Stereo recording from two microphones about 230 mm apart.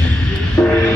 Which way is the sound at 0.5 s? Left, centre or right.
Centre.